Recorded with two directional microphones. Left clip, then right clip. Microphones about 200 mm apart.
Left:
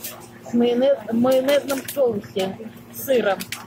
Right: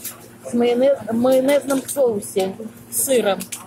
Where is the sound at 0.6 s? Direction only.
10° right (ahead or behind).